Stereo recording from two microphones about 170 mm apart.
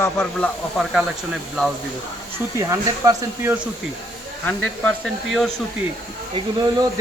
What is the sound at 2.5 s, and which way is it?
Speech, 20° right (ahead or behind).